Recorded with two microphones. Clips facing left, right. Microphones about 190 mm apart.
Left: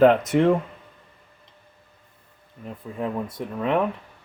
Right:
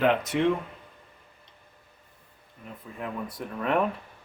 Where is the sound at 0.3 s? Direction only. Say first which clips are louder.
Left 6 dB; 45° left (ahead or behind).